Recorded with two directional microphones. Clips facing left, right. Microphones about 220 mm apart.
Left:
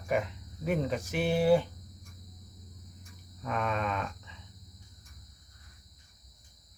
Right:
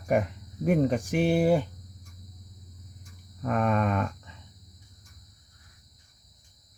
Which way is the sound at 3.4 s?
50° right (ahead or behind).